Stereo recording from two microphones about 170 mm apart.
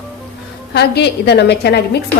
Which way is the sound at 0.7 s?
75° left (ahead or behind).